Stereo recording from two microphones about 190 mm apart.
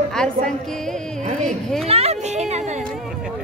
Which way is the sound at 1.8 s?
30° right (ahead or behind).